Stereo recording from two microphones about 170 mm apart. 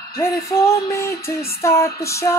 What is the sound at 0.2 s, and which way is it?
Female singing, 15° left (ahead or behind).